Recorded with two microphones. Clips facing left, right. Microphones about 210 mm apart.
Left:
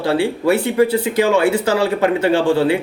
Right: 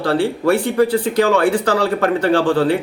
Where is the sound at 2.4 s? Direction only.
25° left (ahead or behind).